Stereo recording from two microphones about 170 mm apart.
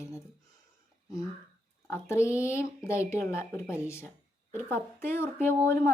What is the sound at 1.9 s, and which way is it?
A child's voice, 15° left (ahead or behind).